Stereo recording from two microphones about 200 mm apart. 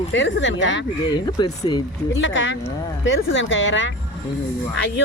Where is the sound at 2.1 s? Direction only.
70° left (ahead or behind).